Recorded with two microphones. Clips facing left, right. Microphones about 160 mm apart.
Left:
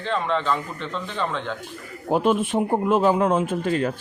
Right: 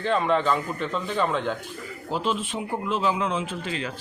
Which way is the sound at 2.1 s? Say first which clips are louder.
Left 7 dB; 55° left (ahead or behind).